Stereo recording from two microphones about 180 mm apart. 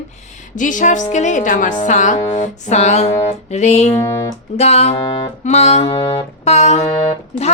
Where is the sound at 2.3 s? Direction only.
40° left (ahead or behind).